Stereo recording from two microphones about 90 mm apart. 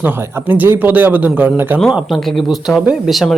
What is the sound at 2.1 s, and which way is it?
Speech, 5° left (ahead or behind).